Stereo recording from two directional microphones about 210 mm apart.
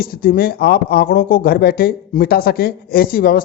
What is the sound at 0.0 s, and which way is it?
Speech, 45° left (ahead or behind).